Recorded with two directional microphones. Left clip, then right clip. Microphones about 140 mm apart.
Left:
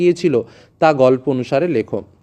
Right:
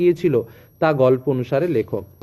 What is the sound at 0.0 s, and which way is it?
A man's voice, 35° left (ahead or behind).